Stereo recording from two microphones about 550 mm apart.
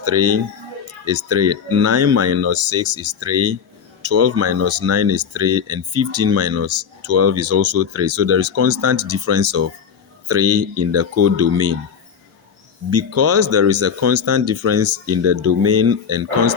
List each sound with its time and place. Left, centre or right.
0.0 s speech: right
12.9 s speech: right